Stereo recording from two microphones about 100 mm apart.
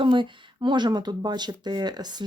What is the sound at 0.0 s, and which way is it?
Speech, 55° right (ahead or behind).